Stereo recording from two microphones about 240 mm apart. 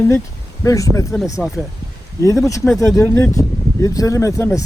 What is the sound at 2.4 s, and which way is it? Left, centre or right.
Speech, centre.